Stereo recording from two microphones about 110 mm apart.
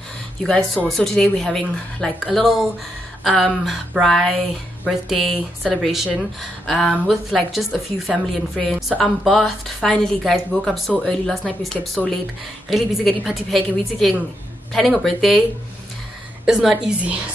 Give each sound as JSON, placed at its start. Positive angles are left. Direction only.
{"t": 0.4, "sound": "a woman's voice", "side_deg": 5}
{"t": 16.4, "sound": "a woman's voice", "side_deg": -5}